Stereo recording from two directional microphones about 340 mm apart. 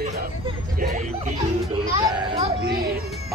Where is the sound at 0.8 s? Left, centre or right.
Right.